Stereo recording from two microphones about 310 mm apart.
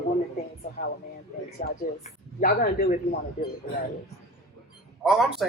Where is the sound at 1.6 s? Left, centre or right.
Left.